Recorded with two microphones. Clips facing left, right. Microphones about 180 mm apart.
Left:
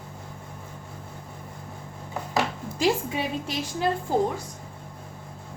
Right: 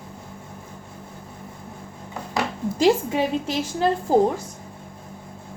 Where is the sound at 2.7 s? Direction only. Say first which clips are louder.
Right 6 dB; 40° right (ahead or behind).